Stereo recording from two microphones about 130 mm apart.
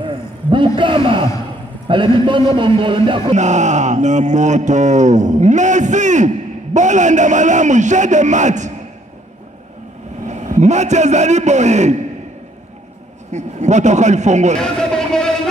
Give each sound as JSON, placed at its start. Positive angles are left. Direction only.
{"t": 0.0, "sound": "a sound", "side_deg": -40}
{"t": 1.9, "sound": "a man's voice", "side_deg": -40}
{"t": 3.3, "sound": "speech", "side_deg": -65}
{"t": 10.2, "sound": "a man's voice", "side_deg": -65}
{"t": 13.3, "sound": "a man's voice", "side_deg": -65}
{"t": 14.6, "sound": "a sound", "side_deg": 5}